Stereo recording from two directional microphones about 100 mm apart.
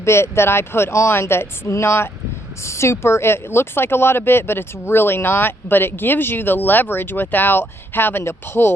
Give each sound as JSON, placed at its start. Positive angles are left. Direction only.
{"t": 0.0, "sound": "speech", "side_deg": 25}